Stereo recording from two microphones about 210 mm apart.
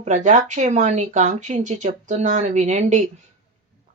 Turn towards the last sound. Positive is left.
turn(degrees=-35)  # may be behind; listen again after turning